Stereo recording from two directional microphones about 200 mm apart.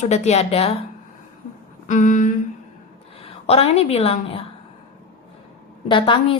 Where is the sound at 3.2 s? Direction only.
30° left (ahead or behind).